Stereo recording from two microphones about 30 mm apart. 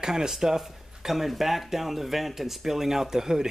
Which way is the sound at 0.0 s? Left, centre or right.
Centre.